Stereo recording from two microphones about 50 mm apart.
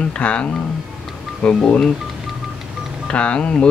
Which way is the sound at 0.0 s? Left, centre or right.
Left.